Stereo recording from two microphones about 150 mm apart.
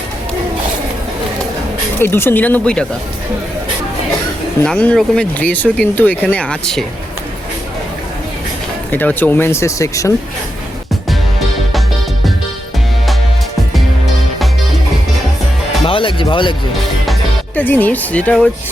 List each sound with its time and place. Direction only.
2.0 s speech: 15° left (ahead or behind)
4.6 s speech: 5° left (ahead or behind)
8.9 s speech: 10° left (ahead or behind)
15.8 s speech: 35° left (ahead or behind)
17.5 s speech: 10° left (ahead or behind)